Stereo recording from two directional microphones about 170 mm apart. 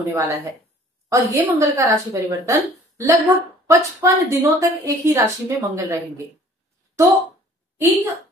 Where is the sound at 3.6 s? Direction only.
15° right (ahead or behind).